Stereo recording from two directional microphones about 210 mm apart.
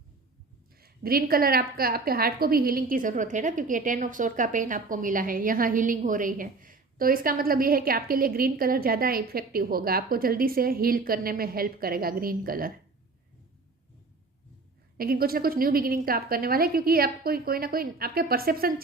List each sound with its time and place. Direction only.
0.8 s a woman's voice: 45° right (ahead or behind)
14.9 s a woman's voice: 45° right (ahead or behind)